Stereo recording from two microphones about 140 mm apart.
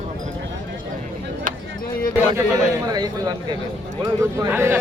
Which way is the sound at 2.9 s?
30° right (ahead or behind).